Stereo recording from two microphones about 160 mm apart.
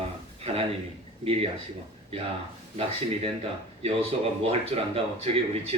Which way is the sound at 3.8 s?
35° right (ahead or behind).